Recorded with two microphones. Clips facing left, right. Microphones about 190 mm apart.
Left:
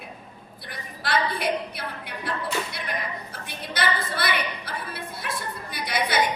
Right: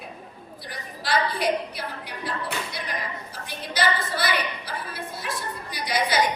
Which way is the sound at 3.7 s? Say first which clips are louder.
Right 2 dB; 55° left (ahead or behind).